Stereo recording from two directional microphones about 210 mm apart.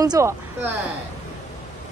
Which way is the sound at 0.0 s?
15° right (ahead or behind).